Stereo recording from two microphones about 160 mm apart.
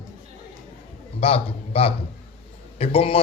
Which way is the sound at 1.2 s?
40° left (ahead or behind).